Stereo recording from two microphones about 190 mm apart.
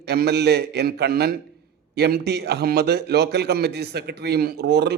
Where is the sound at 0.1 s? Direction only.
60° right (ahead or behind).